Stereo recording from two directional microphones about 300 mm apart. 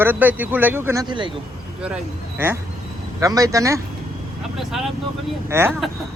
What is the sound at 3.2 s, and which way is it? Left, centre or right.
Speech, centre.